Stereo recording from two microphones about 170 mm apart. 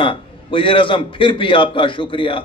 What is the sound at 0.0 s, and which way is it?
A man's voice, 30° left (ahead or behind).